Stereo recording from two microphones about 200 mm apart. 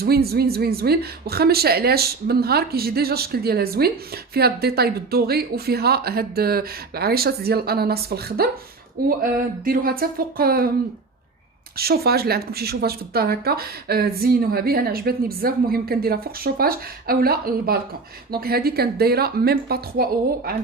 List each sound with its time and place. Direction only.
0.0 s speech: 50° right (ahead or behind)
11.8 s speech: 50° right (ahead or behind)